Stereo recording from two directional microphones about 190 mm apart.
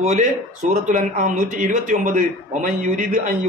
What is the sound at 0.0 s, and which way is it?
Speech, 40° right (ahead or behind).